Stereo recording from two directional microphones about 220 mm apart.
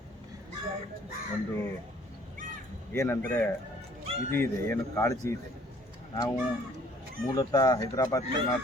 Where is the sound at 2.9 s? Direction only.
10° left (ahead or behind).